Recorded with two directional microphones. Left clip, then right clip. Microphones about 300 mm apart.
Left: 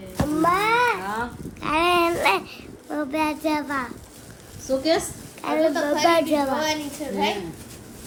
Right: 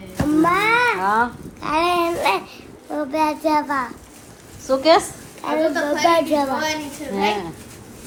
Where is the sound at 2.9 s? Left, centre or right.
Centre.